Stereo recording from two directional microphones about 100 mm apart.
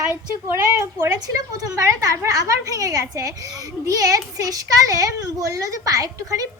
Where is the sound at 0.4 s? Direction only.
30° right (ahead or behind).